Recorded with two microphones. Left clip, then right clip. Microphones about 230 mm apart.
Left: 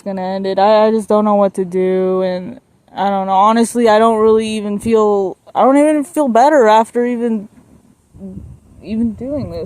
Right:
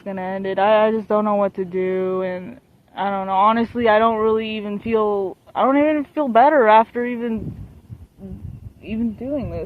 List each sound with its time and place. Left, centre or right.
0.0 s speech: left
8.8 s speech: left
9.2 s speech: left